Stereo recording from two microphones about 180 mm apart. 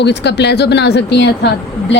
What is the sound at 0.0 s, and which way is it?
Speech, 70° left (ahead or behind).